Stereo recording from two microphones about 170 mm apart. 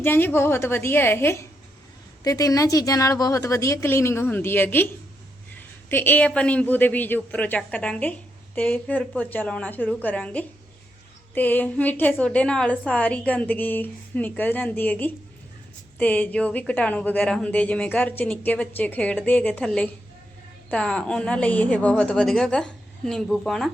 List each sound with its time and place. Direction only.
0.0 s a man's voice: 10° left (ahead or behind)